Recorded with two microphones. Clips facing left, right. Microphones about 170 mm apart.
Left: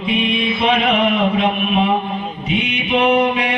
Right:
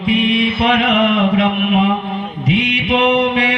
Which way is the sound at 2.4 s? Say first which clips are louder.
Right 5 dB; 90° right.